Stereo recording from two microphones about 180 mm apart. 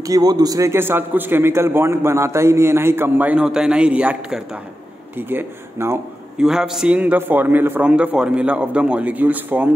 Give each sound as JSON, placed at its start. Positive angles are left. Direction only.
{"t": 0.0, "sound": "a man's voice", "side_deg": -20}